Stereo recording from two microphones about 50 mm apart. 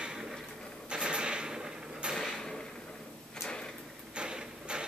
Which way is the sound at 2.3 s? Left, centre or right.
Centre.